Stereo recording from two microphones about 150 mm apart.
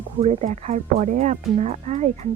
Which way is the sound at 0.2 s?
45° right (ahead or behind).